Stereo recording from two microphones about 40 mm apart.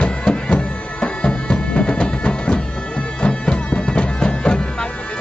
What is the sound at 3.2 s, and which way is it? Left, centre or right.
Bagpipes, left.